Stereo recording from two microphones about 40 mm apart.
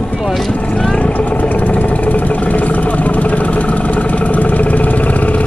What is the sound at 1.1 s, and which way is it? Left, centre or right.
Vehicle, left.